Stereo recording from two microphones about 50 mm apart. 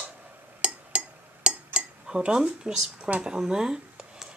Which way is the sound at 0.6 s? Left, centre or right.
Right.